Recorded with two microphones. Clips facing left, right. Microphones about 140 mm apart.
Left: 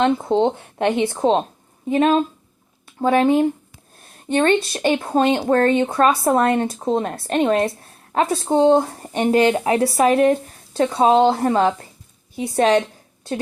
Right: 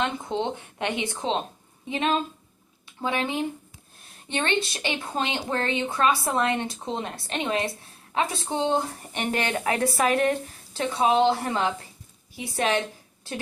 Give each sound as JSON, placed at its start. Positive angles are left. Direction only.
{"t": 0.0, "sound": "speech", "side_deg": 55}